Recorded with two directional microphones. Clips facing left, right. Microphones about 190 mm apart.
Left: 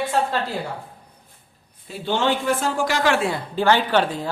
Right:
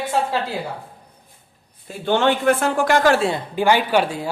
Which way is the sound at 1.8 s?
55° right (ahead or behind).